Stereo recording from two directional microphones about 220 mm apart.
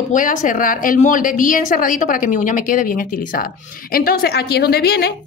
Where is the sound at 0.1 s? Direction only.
35° left (ahead or behind).